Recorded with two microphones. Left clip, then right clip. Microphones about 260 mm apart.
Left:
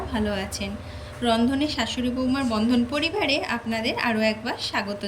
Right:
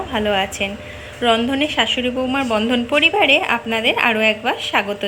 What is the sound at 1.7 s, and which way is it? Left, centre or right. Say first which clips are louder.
A woman's voice: right 9 dB; centre.